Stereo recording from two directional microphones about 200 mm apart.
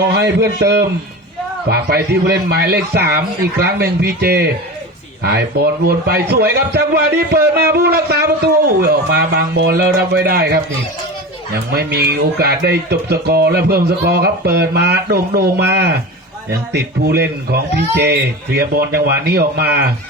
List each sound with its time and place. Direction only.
0.2 s a man's voice: 55° right (ahead or behind)